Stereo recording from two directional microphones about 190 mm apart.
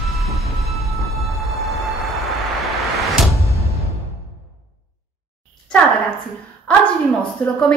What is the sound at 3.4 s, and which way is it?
Music, 15° right (ahead or behind).